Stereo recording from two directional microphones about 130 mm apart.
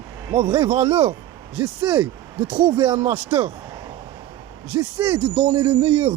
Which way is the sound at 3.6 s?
30° right (ahead or behind).